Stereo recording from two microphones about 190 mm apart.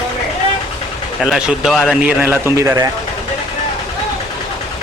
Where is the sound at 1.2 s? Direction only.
Centre (ahead or behind).